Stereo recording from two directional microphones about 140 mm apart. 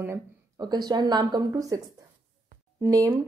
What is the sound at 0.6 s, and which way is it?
A woman's voice, 30° right (ahead or behind).